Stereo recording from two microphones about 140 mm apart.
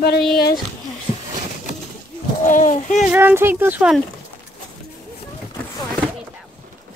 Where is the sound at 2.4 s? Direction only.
65° left (ahead or behind).